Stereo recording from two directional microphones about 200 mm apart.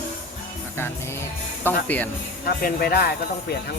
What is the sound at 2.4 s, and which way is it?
Speech, 50° left (ahead or behind).